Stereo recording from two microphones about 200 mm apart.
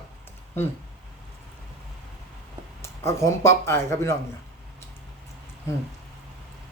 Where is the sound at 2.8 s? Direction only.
15° left (ahead or behind).